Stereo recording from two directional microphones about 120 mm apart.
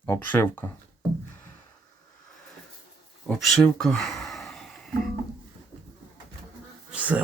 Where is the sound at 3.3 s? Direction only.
5° left (ahead or behind).